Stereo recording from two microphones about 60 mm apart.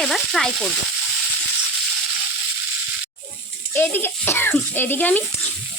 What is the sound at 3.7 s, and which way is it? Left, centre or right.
A child's voice, left.